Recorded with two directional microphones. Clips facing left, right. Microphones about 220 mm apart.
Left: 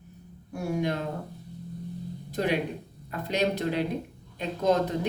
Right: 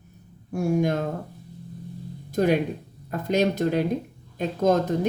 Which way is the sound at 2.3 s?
45° right (ahead or behind).